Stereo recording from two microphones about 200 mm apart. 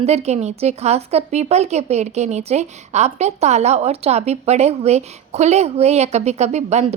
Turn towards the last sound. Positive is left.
turn(degrees=-35)  # may be behind; listen again after turning